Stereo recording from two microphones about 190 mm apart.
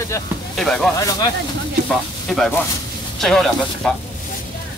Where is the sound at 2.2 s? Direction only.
Centre (ahead or behind).